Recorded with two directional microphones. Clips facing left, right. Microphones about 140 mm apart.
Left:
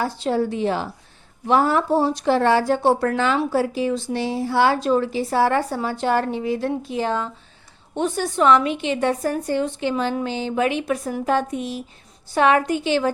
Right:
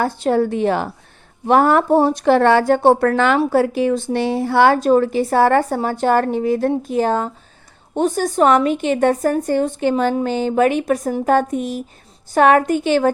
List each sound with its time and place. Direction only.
0.0 s a woman's voice: 55° right (ahead or behind)